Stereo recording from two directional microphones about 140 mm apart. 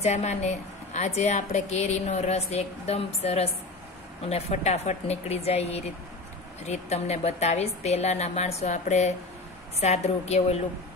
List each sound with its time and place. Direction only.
0.0 s a woman's voice: 55° left (ahead or behind)